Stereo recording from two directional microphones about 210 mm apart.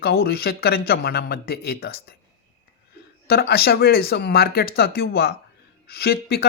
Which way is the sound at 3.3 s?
50° left (ahead or behind).